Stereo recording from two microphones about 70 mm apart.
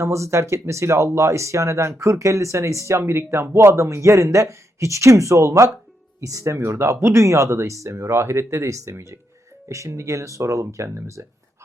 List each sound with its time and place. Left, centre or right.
0.0 s speech: right